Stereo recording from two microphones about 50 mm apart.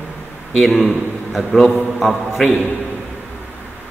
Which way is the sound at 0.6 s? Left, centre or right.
Centre.